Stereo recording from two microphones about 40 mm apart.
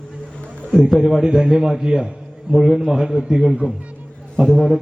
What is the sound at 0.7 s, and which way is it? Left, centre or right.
A man's voice, centre.